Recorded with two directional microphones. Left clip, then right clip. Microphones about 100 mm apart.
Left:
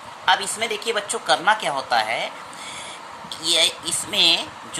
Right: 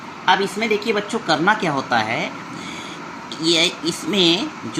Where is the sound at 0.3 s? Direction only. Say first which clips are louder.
Right 3 dB; 20° left (ahead or behind).